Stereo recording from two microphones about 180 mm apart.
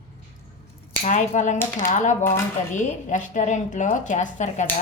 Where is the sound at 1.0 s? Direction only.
40° left (ahead or behind).